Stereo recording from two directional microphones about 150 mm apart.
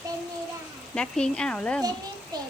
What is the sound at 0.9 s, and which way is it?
Speech, 5° left (ahead or behind).